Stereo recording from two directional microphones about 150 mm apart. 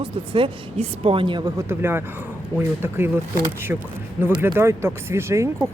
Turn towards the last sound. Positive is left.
turn(degrees=-20)  # may be behind; listen again after turning